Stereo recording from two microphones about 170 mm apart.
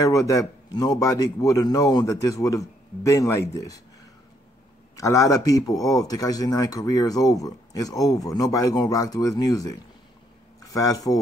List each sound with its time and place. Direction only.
0.0 s speech: 20° left (ahead or behind)
4.9 s speech: 20° left (ahead or behind)